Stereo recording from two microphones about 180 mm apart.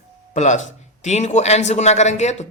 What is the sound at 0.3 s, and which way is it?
A woman's voice, 40° left (ahead or behind).